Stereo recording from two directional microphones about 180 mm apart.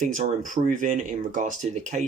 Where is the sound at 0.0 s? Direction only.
45° right (ahead or behind).